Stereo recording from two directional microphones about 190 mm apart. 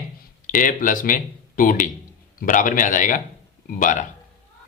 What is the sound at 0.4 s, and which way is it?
Speech, 45° left (ahead or behind).